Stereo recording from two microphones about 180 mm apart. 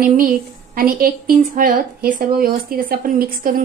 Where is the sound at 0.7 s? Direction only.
55° right (ahead or behind).